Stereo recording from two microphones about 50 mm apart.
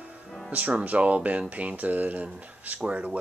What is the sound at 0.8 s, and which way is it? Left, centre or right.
Speech, right.